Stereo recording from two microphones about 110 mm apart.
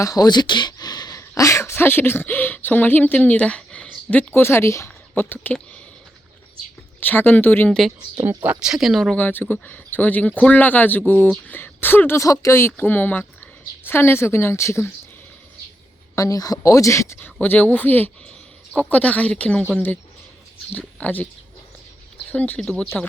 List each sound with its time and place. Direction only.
0.0 s speech: 35° left (ahead or behind); by 5.5 s 15° left (ahead or behind)
7.0 s speech: 15° left (ahead or behind)
7.7 s speech: 5° left (ahead or behind)
8.4 s speech: 10° right (ahead or behind)
9.2 s speech: 15° left (ahead or behind)
16.1 s speech: 30° left (ahead or behind)
17.4 s speech: 15° left (ahead or behind)
22.3 s speech: 15° left (ahead or behind)